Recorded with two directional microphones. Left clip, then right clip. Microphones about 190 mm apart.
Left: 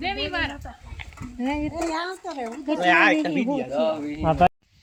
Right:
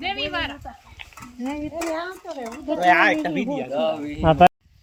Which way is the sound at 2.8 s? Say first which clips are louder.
Right 1 dB; 5° right (ahead or behind).